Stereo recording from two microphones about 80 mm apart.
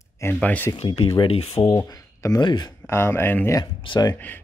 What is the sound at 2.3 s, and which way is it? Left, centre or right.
Speech, left.